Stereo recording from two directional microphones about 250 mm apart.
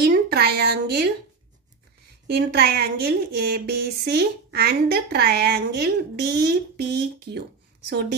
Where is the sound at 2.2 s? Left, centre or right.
Right.